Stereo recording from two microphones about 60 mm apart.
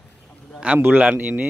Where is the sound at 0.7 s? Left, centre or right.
Right.